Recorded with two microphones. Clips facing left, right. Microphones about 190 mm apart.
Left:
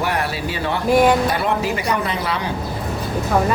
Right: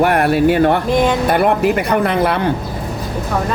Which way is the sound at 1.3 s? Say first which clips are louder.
Right 7 dB; 55° right (ahead or behind).